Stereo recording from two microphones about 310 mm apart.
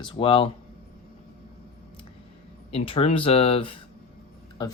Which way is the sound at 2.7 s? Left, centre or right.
Centre.